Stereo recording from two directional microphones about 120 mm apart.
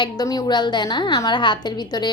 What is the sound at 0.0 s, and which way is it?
A woman's voice, 30° left (ahead or behind).